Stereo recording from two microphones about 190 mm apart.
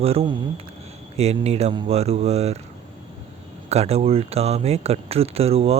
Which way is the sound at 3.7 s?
35° right (ahead or behind).